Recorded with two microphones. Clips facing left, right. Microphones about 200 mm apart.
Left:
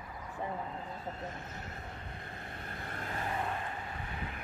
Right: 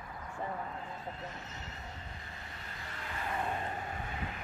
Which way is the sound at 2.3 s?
55° left (ahead or behind).